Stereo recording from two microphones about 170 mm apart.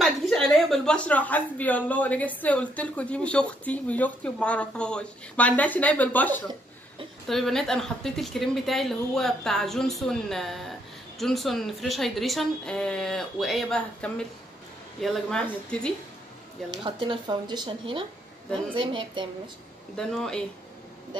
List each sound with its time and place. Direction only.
0.0 s a woman's voice: centre (ahead or behind)
16.8 s speech: 25° right (ahead or behind)
20.0 s speech: 5° left (ahead or behind)